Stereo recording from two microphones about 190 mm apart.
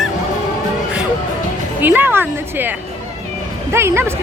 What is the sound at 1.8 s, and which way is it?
A woman's voice, 10° right (ahead or behind).